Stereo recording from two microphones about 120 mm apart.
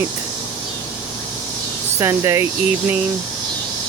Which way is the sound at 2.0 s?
20° right (ahead or behind).